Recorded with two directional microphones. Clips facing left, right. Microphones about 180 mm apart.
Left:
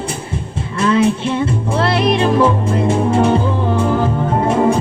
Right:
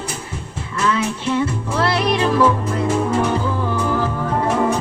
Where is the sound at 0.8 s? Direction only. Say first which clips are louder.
Left 6 dB; 30° left (ahead or behind).